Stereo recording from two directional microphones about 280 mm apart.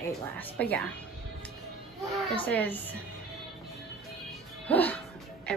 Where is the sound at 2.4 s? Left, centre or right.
Centre.